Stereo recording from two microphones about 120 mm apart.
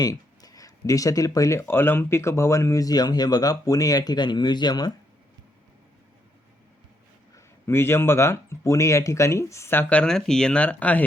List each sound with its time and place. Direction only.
0.0 s speech: 30° left (ahead or behind)
7.3 s speech: 20° left (ahead or behind)